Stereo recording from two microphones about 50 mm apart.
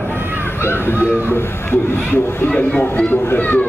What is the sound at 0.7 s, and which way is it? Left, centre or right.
Speech, left.